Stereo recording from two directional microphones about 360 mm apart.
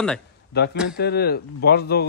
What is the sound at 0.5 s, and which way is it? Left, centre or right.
Speech, left.